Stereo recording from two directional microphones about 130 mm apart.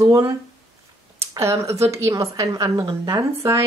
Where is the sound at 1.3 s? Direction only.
20° right (ahead or behind).